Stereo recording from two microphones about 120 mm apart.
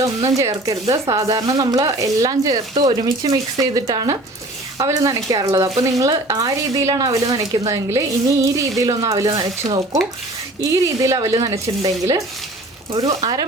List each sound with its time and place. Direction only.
0.0 s speech: 30° right (ahead or behind)
9.3 s speech: 40° right (ahead or behind)